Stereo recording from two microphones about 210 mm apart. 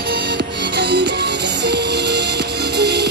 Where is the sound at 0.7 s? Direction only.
55° right (ahead or behind).